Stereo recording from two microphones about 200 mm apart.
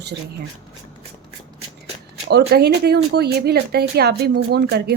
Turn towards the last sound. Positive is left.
turn(degrees=-55)  # may be behind; listen again after turning